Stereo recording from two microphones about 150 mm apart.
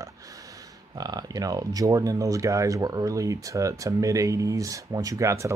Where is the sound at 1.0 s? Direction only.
25° right (ahead or behind).